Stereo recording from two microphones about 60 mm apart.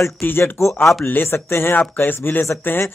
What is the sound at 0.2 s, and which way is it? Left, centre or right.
Speech, left.